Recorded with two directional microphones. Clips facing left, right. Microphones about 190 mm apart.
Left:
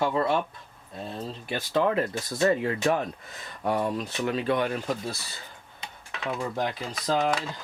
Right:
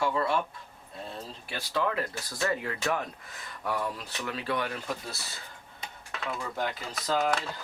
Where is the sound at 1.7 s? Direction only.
25° left (ahead or behind).